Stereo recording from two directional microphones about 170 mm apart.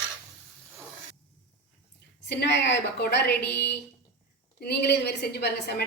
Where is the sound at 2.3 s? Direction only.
90° left.